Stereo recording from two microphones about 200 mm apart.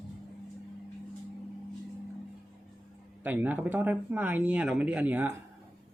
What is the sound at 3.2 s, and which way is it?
Speech, 10° right (ahead or behind).